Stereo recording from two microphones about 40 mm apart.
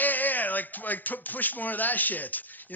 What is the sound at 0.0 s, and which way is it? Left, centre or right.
Speech, left.